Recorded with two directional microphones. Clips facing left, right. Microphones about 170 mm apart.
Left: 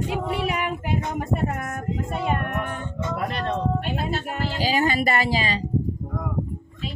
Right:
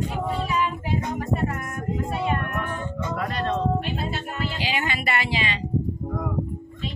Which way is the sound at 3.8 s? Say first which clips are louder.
Left 2 dB; 45° left (ahead or behind).